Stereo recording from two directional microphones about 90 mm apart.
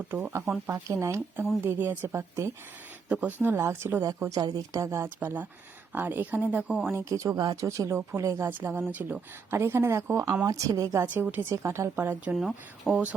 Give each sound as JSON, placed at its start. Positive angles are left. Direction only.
{"t": 0.7, "sound": "speech", "side_deg": -35}
{"t": 3.1, "sound": "speech", "side_deg": -15}
{"t": 4.2, "sound": "speech", "side_deg": -40}
{"t": 6.9, "sound": "speech", "side_deg": -35}
{"t": 8.4, "sound": "speech", "side_deg": -20}
{"t": 11.0, "sound": "speech", "side_deg": -20}
{"t": 12.4, "sound": "speech", "side_deg": 0}